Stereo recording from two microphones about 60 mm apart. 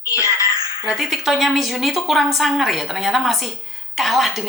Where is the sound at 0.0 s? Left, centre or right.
Left.